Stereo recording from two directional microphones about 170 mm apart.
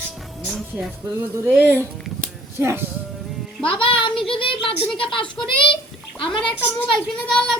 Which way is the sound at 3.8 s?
30° left (ahead or behind).